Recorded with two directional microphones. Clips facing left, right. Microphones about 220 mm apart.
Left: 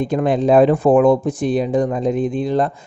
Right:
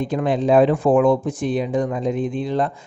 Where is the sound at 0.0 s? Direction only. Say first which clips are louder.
Left 3 dB; 50° left (ahead or behind).